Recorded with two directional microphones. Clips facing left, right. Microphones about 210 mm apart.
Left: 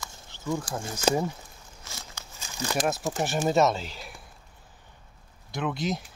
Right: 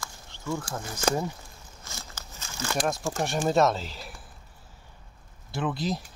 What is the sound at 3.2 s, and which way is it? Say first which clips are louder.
Speech: even; centre (ahead or behind).